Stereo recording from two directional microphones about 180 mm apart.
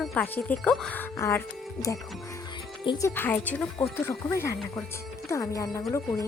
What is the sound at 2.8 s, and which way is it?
Speech, 25° left (ahead or behind).